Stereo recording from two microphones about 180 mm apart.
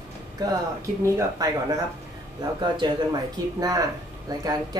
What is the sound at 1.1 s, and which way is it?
Speech, 20° right (ahead or behind).